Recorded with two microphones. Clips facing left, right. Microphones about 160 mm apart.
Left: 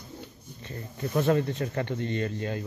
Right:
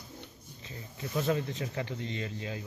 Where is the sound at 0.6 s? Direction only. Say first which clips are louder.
Left 7 dB; 60° left (ahead or behind).